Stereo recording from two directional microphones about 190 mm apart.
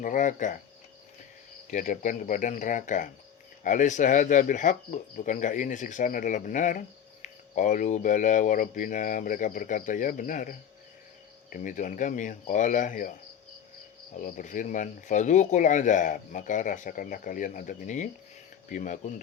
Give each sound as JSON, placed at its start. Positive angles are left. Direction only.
{"t": 0.0, "sound": "speech", "side_deg": 45}
{"t": 1.7, "sound": "speech", "side_deg": 40}
{"t": 14.3, "sound": "speech", "side_deg": 45}